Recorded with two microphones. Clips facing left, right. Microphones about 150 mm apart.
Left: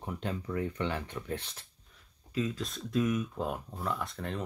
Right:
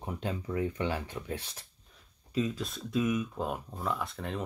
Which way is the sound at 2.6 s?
5° right (ahead or behind).